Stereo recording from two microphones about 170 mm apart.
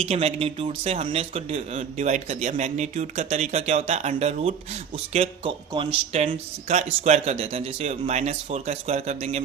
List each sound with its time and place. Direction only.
0.0 s speech: 35° right (ahead or behind)